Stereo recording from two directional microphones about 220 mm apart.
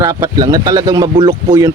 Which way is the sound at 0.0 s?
15° right (ahead or behind).